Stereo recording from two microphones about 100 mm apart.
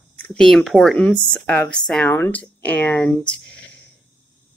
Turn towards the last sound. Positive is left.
turn(degrees=10)  # may be behind; listen again after turning